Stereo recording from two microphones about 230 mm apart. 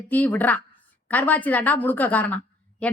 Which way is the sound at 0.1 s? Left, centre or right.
Centre.